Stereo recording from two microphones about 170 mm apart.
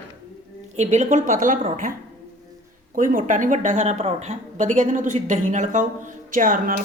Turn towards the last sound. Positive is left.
turn(degrees=-50)  # may be behind; listen again after turning